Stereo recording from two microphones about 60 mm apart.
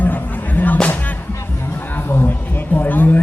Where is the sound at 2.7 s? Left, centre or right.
Left.